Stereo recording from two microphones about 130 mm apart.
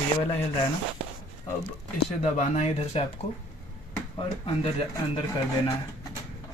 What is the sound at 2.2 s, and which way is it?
Speech, 55° left (ahead or behind).